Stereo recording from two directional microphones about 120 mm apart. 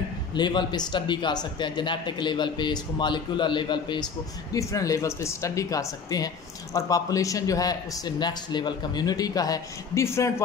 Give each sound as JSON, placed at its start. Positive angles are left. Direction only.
{"t": 0.3, "sound": "speech", "side_deg": 40}
{"t": 4.6, "sound": "speech", "side_deg": 25}